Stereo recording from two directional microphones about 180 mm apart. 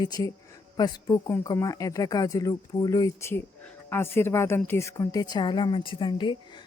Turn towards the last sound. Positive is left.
turn(degrees=25)  # may be behind; listen again after turning